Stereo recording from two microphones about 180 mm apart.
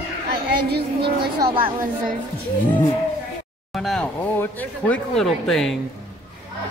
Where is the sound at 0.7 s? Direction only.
60° right (ahead or behind).